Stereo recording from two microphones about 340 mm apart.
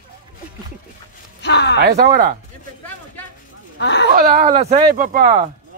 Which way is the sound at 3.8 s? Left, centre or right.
Left.